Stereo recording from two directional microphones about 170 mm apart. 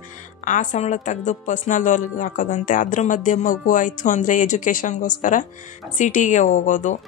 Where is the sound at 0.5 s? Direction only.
50° left (ahead or behind).